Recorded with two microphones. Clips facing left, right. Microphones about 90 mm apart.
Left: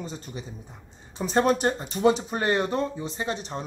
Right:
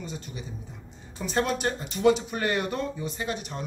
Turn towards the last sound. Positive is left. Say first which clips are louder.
# left 2 dB
turn(degrees=30)  # may be behind; listen again after turning